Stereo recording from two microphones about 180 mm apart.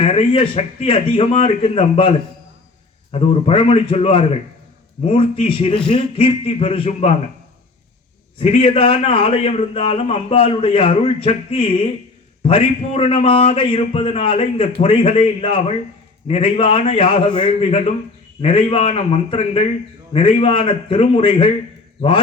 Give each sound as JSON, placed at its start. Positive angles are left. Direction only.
{"t": 0.0, "sound": "a man's voice", "side_deg": 35}
{"t": 8.4, "sound": "a man's voice", "side_deg": 30}